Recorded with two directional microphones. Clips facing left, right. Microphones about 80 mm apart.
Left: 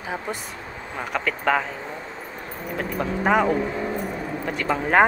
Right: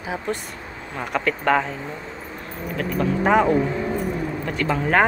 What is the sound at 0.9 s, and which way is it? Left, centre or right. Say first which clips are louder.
Speech: right 3 dB; centre.